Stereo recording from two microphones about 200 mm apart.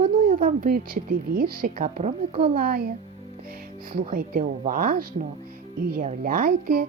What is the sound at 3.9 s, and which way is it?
A woman's voice, 45° right (ahead or behind).